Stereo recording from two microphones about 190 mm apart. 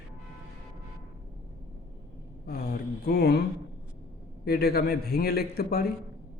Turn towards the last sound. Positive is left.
turn(degrees=55)  # may be behind; listen again after turning